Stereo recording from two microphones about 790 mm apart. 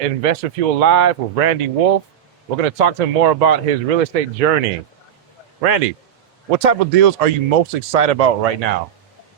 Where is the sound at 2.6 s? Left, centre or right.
Right.